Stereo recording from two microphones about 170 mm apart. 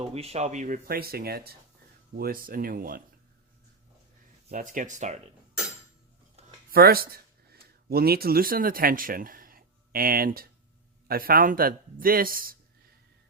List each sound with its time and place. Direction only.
0.1 s speech: 40° right (ahead or behind); by 3.0 s 55° right (ahead or behind)
4.5 s speech: 50° right (ahead or behind)
6.7 s speech: 60° right (ahead or behind)